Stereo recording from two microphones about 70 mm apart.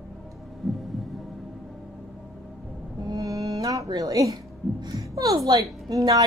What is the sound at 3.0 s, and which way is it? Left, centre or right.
Music, right.